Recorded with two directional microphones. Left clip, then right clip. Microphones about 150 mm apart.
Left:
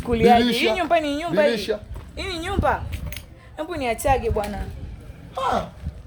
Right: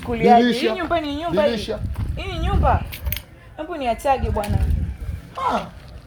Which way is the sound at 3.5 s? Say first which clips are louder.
Right 2 dB; 25° left (ahead or behind).